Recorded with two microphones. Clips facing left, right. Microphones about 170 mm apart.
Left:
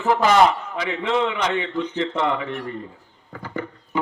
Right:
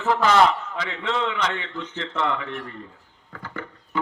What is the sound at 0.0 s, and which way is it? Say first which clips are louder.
A man's voice: left 2 dB; 15° left (ahead or behind).